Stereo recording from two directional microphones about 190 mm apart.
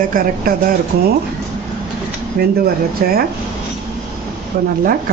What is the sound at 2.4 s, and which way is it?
Speech, 50° right (ahead or behind).